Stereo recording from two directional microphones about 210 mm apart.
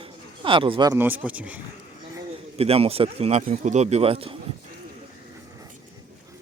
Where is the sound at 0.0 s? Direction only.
25° right (ahead or behind).